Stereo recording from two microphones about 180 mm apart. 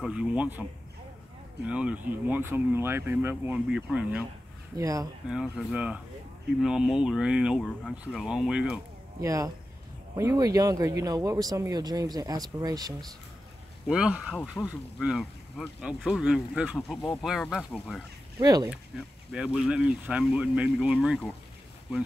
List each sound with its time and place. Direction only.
0.0 s speech: 5° right (ahead or behind)
1.7 s speech: 5° right (ahead or behind)
4.7 s speech: 20° right (ahead or behind)
5.3 s speech: 5° right (ahead or behind)
9.2 s speech: 15° right (ahead or behind)
13.8 s speech: 5° right (ahead or behind)
18.4 s speech: 20° right (ahead or behind)
18.9 s speech: 5° right (ahead or behind)